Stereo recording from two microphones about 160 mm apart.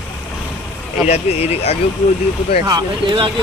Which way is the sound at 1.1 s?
40° left (ahead or behind).